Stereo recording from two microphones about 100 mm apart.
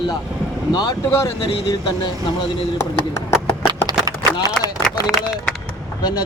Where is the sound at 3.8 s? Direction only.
35° right (ahead or behind).